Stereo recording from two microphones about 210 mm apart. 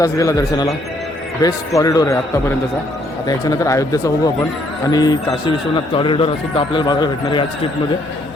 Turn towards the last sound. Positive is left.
turn(degrees=25)  # may be behind; listen again after turning